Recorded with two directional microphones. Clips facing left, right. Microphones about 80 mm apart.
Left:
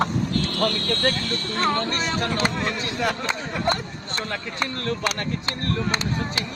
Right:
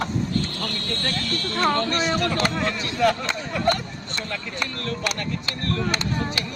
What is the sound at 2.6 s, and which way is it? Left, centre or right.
Speech, centre.